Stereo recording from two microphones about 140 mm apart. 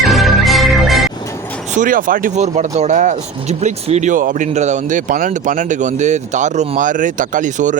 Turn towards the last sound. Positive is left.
turn(degrees=-65)  # may be behind; listen again after turning